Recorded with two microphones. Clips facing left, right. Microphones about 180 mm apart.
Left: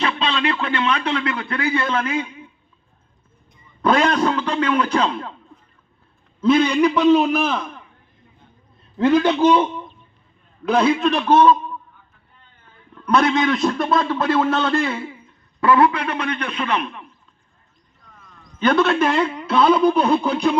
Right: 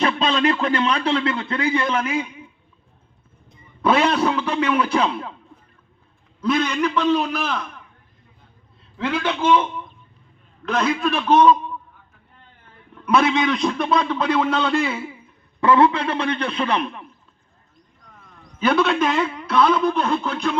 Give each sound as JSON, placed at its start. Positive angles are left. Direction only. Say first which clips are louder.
{"t": 0.0, "sound": "a man's voice", "louder": "right 3 dB", "side_deg": -45}
{"t": 3.8, "sound": "a man's voice", "louder": "left 1 dB", "side_deg": -5}
{"t": 6.6, "sound": "a man's voice", "louder": "left 5 dB", "side_deg": 15}
{"t": 9.0, "sound": "a man's voice", "louder": "left 8 dB", "side_deg": 45}
{"t": 10.8, "sound": "a man's voice", "louder": "right 1 dB", "side_deg": 20}
{"t": 13.1, "sound": "a man's voice", "louder": "left 1 dB", "side_deg": -5}
{"t": 15.6, "sound": "a man's voice", "louder": "even", "side_deg": -25}
{"t": 18.6, "sound": "a man's voice", "louder": "left 2 dB", "side_deg": 0}
{"t": 19.5, "sound": "a man's voice", "louder": "left 3 dB", "side_deg": 30}
{"t": 19.9, "sound": "a man's voice", "louder": "left 4 dB", "side_deg": 15}